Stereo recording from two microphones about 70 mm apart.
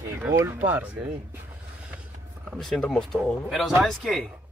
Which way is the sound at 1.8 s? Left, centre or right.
Centre.